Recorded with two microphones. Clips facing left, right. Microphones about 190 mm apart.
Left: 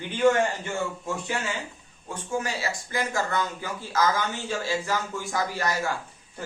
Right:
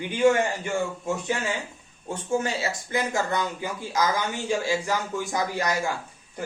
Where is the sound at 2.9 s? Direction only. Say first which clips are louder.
Right 2 dB; 15° right (ahead or behind).